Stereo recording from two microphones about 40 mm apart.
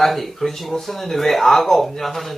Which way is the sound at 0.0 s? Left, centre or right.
Centre.